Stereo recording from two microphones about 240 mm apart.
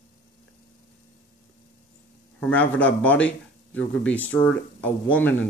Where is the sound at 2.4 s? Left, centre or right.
Centre.